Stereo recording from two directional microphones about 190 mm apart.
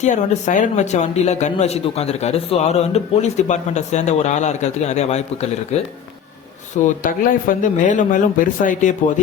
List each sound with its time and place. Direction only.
0.0 s speech: 40° left (ahead or behind)
6.8 s speech: 45° left (ahead or behind)